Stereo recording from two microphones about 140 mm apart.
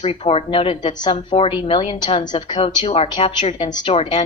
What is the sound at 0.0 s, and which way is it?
A woman's voice, 45° left (ahead or behind).